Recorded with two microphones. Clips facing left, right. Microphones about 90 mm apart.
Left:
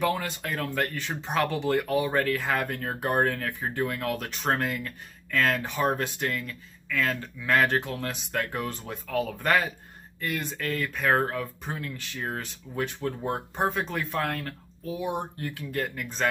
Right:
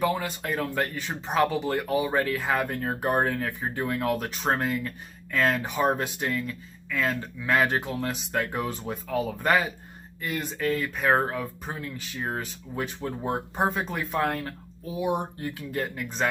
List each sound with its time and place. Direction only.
0.0 s speech: 5° right (ahead or behind)